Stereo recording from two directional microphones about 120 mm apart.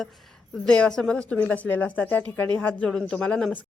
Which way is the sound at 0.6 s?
5° left (ahead or behind).